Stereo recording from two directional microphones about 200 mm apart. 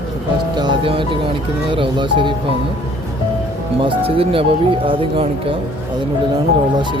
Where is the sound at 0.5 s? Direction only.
25° right (ahead or behind).